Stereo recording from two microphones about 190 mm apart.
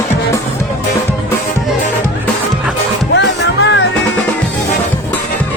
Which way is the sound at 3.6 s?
75° left (ahead or behind).